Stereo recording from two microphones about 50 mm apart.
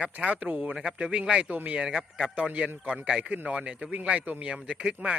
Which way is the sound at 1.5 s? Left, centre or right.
Right.